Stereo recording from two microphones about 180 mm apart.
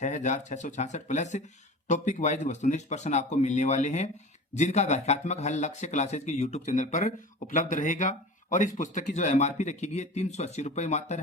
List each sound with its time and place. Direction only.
0.0 s speech: 40° left (ahead or behind)